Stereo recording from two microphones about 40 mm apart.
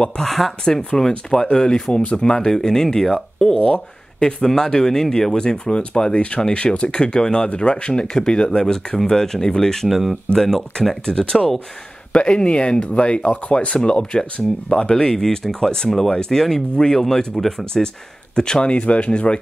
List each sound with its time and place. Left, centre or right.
0.2 s speech: centre
0.7 s speech: centre
3.5 s speech: left
4.2 s speech: centre
9.8 s speech: centre
10.3 s speech: centre
11.1 s speech: left
18.3 s speech: left